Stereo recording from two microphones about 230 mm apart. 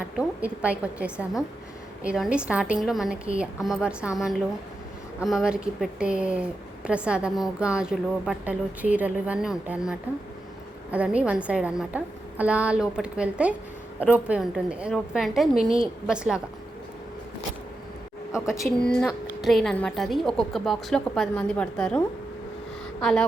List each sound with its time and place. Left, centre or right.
0.2 s a woman's voice: centre
18.3 s a woman's voice: centre